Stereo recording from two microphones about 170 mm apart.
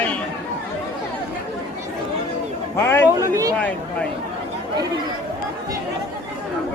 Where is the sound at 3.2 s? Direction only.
20° right (ahead or behind).